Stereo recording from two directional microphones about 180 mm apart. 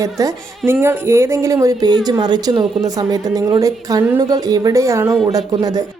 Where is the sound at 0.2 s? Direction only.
15° right (ahead or behind).